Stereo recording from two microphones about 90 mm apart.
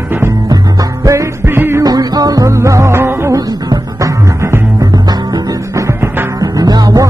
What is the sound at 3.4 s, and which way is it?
Music, 40° right (ahead or behind).